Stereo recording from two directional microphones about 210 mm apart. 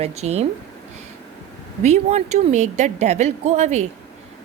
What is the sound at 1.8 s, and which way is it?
Speech, 35° right (ahead or behind).